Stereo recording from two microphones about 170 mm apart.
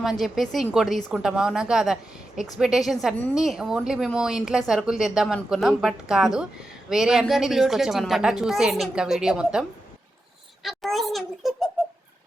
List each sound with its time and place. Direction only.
0.0 s a woman's voice: centre (ahead or behind)